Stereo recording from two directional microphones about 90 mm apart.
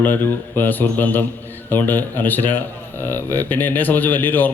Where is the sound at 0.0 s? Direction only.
20° left (ahead or behind).